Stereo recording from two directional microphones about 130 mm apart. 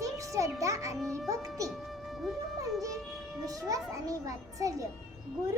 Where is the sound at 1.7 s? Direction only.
Centre (ahead or behind).